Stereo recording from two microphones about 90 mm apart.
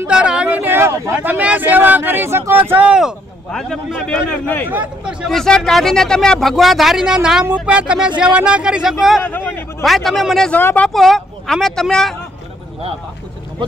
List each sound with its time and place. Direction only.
0.0 s speech: 10° right (ahead or behind); by 2.5 s 30° right (ahead or behind)
2.7 s speech: 15° right (ahead or behind)
3.5 s a man's voice: 5° left (ahead or behind)
9.2 s speech: 25° left (ahead or behind)
9.8 s speech: centre (ahead or behind)
10.5 s speech: 20° left (ahead or behind)
10.9 s speech: 5° left (ahead or behind)